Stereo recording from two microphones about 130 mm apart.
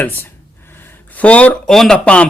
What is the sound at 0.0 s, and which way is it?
Speech, 15° left (ahead or behind).